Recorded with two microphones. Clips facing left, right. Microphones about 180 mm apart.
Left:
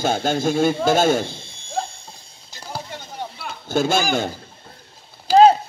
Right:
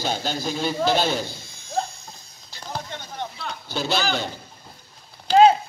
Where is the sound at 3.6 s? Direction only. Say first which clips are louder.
Left 7 dB; 50° left (ahead or behind).